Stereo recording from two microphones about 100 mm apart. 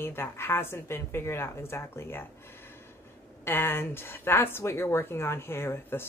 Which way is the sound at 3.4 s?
20° left (ahead or behind).